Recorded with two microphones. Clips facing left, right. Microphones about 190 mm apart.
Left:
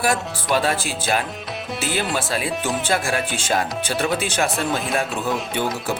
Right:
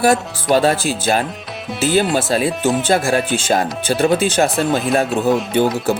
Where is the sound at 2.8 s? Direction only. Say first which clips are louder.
Right 6 dB; 40° right (ahead or behind).